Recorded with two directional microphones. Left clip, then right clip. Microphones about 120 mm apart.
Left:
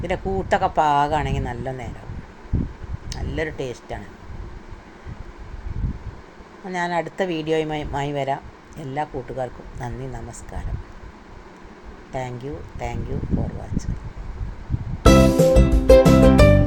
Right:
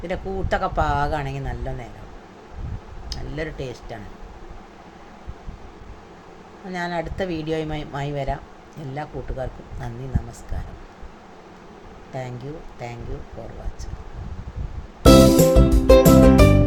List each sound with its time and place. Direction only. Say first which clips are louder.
0.1 s speech: left 3 dB; 30° left (ahead or behind)
3.1 s speech: left 3 dB; 25° left (ahead or behind)
6.7 s speech: left 3 dB; 25° left (ahead or behind)
12.1 s speech: left 3 dB; 30° left (ahead or behind)
15.0 s music: right 2 dB; centre (ahead or behind)